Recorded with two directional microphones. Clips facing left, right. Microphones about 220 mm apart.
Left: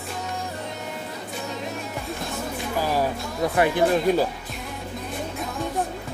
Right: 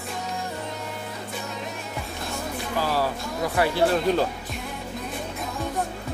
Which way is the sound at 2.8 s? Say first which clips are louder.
Left 1 dB; 15° left (ahead or behind).